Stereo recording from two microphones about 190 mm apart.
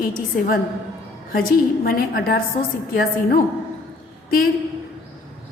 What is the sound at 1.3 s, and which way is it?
A woman's voice, 50° left (ahead or behind).